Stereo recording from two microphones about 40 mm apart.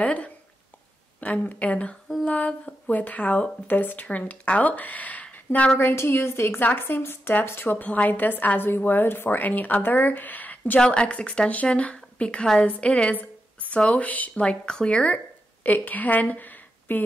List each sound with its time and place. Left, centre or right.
0.0 s a woman's voice: left
5.8 s a woman's voice: left
6.6 s a woman's voice: left
7.4 s a woman's voice: left
7.7 s a woman's voice: left
9.4 s speech: left
10.8 s speech: left
13.1 s a sound: left
13.9 s speech: left
14.3 s speech: left
15.6 s a woman's voice: left